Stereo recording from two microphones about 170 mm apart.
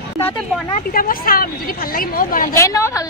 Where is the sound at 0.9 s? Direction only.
55° left (ahead or behind).